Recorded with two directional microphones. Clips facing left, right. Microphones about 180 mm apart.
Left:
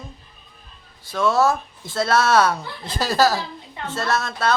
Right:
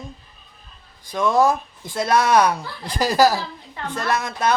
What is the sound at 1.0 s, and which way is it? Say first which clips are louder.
Speech: right 1 dB; 15° right (ahead or behind).